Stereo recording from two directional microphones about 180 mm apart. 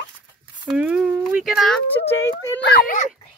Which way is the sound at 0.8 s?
5° right (ahead or behind).